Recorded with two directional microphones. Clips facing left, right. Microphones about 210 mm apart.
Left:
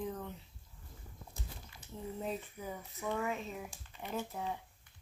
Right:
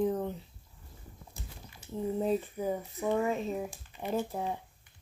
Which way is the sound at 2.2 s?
35° right (ahead or behind).